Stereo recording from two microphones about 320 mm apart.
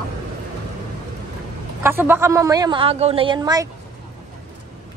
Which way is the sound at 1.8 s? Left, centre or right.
Centre.